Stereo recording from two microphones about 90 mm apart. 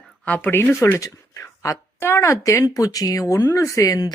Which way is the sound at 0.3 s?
20° left (ahead or behind).